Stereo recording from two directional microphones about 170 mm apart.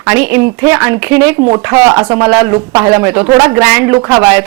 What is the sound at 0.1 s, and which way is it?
Speech, 10° right (ahead or behind).